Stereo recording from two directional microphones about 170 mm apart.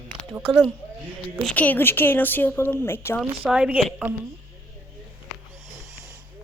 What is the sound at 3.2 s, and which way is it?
Speech, 5° right (ahead or behind).